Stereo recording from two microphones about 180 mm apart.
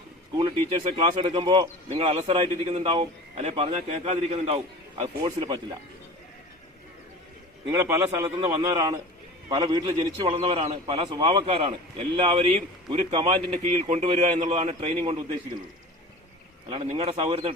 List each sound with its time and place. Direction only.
0.3 s a man's voice: 30° right (ahead or behind)
5.0 s a man's voice: 25° right (ahead or behind)
7.7 s a man's voice: 15° right (ahead or behind); by 15.1 s 35° right (ahead or behind)
16.6 s a man's voice: 25° right (ahead or behind)